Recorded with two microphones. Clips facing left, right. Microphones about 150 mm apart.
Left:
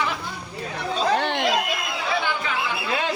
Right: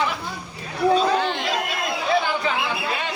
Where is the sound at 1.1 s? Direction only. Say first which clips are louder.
Right 1 dB; 65° left (ahead or behind).